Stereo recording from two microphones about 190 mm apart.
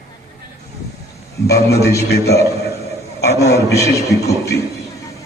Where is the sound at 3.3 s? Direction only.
15° left (ahead or behind).